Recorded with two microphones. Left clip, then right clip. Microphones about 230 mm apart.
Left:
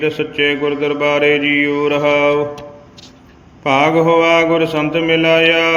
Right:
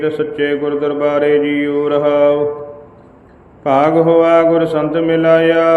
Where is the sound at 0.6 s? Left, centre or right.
Left.